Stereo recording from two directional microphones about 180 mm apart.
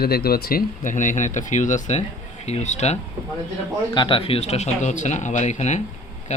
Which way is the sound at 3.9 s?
25° left (ahead or behind).